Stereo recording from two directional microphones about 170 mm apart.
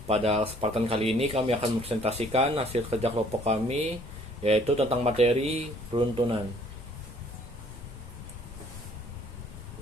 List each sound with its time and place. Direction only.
0.1 s speech: 35° right (ahead or behind)